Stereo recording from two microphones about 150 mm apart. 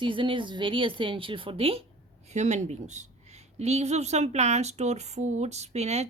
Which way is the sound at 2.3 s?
50° right (ahead or behind).